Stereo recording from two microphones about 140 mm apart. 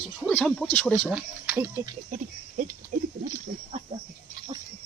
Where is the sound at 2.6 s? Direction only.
70° right (ahead or behind).